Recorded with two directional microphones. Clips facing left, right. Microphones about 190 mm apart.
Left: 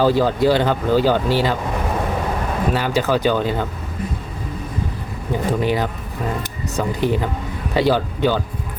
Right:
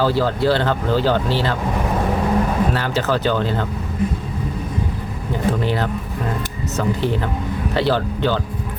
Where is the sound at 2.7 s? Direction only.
15° left (ahead or behind).